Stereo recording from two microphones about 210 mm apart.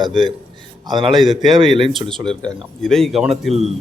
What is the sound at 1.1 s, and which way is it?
Speech, centre (ahead or behind).